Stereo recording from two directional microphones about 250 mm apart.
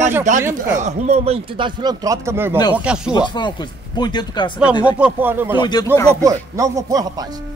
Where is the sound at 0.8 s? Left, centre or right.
Right; by 3.1 s centre.